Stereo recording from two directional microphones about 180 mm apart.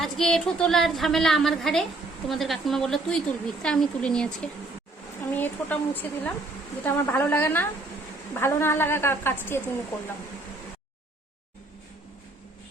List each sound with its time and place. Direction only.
0.0 s a woman's voice: centre (ahead or behind)